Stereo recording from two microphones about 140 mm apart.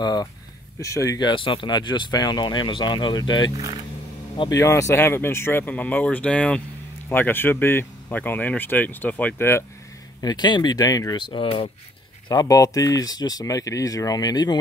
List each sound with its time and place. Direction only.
0.0 s speech: 30° left (ahead or behind)
10.2 s speech: 30° left (ahead or behind)
12.3 s speech: 25° left (ahead or behind)